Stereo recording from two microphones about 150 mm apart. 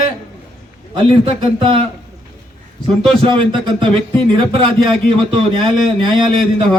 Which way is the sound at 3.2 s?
30° right (ahead or behind).